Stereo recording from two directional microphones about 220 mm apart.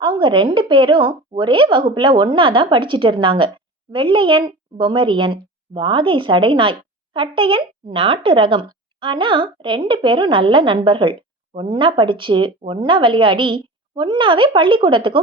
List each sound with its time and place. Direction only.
0.0 s a woman's voice: 20° right (ahead or behind)